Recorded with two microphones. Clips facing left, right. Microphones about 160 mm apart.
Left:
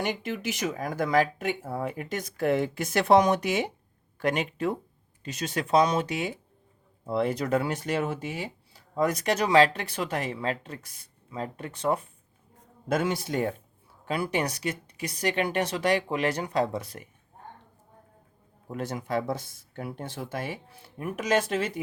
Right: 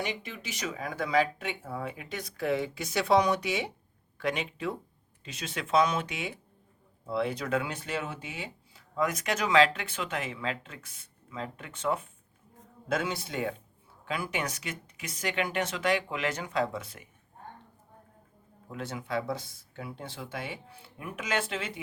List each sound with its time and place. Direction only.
0.0 s speech: 50° left (ahead or behind)
14.0 s speech: 35° left (ahead or behind)
18.7 s speech: 45° left (ahead or behind)